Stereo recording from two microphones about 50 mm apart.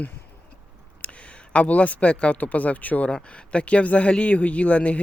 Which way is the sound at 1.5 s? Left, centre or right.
Left.